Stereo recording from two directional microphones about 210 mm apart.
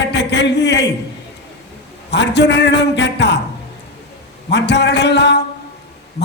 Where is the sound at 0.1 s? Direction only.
55° left (ahead or behind).